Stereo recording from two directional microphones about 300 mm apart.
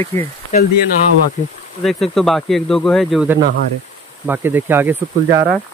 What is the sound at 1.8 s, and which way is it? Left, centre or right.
Speech, centre.